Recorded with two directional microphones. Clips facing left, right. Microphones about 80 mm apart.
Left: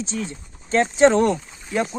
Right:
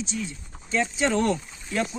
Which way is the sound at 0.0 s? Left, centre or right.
Left.